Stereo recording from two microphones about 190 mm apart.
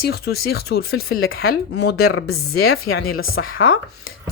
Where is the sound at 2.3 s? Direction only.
90° left.